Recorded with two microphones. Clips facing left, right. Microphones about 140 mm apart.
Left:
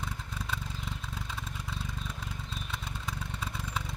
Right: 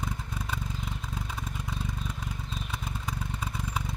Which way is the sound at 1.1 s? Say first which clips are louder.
Right 3 dB; 15° right (ahead or behind).